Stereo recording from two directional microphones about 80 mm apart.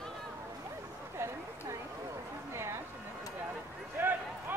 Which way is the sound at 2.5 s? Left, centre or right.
Right.